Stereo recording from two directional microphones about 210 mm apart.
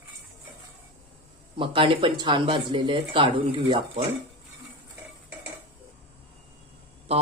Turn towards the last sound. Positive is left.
turn(degrees=-30)  # may be behind; listen again after turning